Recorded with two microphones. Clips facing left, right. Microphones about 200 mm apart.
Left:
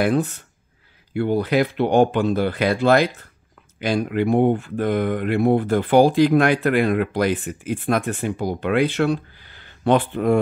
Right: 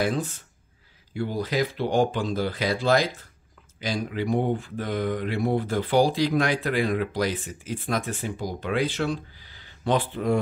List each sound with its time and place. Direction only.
0.0 s speech: 60° left (ahead or behind)